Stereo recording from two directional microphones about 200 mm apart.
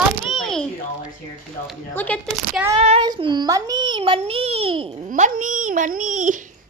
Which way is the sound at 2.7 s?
35° right (ahead or behind).